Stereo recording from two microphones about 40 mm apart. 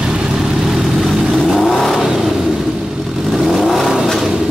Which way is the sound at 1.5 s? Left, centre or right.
Centre.